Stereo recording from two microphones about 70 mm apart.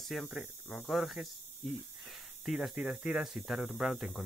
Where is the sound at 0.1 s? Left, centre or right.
Centre.